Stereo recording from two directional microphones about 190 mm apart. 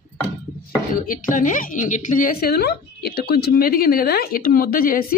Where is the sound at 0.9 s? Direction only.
45° left (ahead or behind).